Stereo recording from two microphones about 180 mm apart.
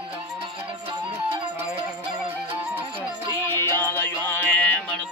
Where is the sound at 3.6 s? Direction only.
15° left (ahead or behind).